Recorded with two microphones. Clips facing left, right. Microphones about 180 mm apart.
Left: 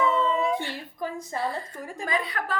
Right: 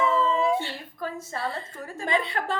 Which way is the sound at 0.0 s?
Centre (ahead or behind).